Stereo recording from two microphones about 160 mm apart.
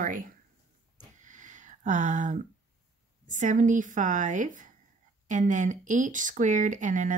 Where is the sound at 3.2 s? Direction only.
50° right (ahead or behind).